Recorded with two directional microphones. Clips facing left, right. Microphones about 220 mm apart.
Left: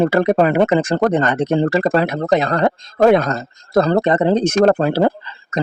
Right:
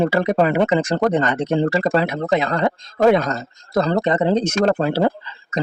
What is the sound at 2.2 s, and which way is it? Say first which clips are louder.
Speech: left 3 dB; 40° left (ahead or behind).